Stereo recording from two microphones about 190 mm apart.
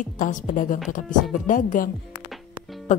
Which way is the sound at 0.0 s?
45° left (ahead or behind).